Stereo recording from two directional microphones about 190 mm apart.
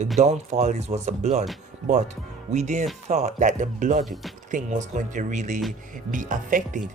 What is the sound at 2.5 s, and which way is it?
Speech, 40° right (ahead or behind).